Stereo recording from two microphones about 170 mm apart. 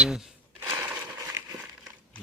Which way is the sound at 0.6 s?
20° right (ahead or behind).